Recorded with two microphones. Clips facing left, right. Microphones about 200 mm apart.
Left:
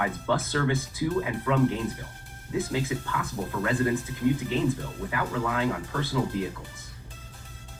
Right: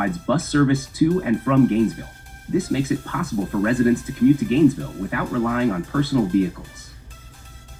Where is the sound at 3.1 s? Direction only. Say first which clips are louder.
Right 7 dB; 50° right (ahead or behind).